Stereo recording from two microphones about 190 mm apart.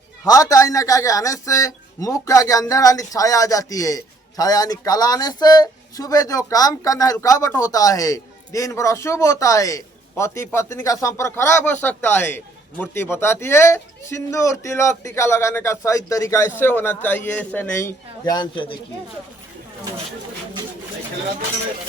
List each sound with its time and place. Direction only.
0.3 s speech: 15° left (ahead or behind)